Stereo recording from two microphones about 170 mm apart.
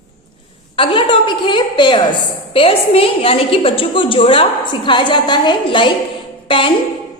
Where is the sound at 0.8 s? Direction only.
30° left (ahead or behind).